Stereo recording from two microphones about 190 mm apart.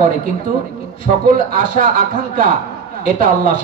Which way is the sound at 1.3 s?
45° right (ahead or behind).